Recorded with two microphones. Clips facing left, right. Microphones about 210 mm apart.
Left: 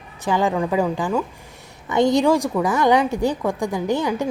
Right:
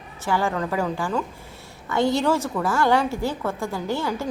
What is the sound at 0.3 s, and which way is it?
A woman's voice, 20° left (ahead or behind).